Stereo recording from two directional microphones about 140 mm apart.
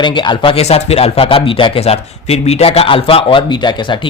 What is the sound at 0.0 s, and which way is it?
A man's voice, 35° left (ahead or behind).